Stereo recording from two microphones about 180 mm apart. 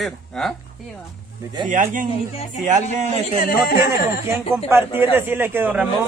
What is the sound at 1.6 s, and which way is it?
Speech, 45° right (ahead or behind).